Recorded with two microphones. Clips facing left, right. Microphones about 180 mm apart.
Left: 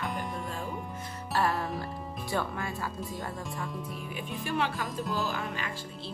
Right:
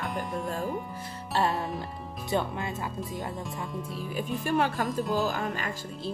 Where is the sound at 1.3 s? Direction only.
20° right (ahead or behind).